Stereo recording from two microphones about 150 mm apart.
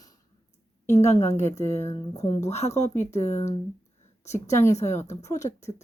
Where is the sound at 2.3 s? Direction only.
45° left (ahead or behind).